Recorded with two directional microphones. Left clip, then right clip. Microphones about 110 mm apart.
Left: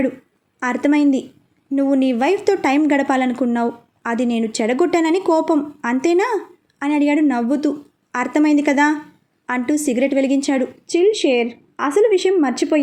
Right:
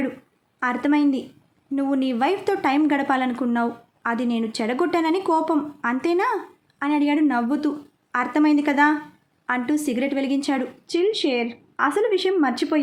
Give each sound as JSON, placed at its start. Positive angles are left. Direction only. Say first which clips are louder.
{"t": 0.6, "sound": "a woman's voice", "louder": "left 4 dB", "side_deg": 30}